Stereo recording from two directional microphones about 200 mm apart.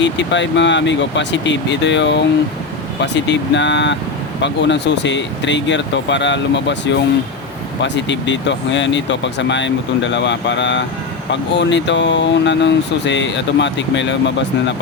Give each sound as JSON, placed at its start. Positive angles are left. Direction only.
{"t": 0.0, "sound": "speech", "side_deg": 65}
{"t": 7.8, "sound": "speech", "side_deg": 65}